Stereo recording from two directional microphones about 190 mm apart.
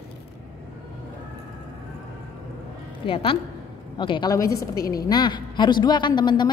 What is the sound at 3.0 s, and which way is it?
A woman's voice, 30° left (ahead or behind).